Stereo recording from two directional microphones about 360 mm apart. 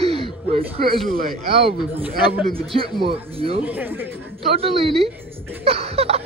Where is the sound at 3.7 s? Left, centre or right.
Centre.